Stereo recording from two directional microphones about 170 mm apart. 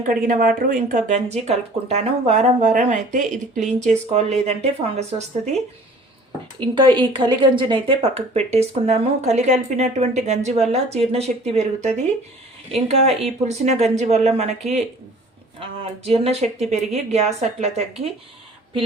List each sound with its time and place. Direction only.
0.1 s speech: 55° right (ahead or behind)
3.8 s speech: 40° right (ahead or behind)
6.6 s speech: 30° right (ahead or behind)
15.8 s speech: 35° right (ahead or behind)